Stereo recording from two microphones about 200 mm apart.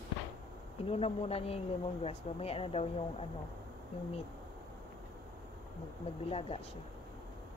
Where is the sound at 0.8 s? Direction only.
30° left (ahead or behind).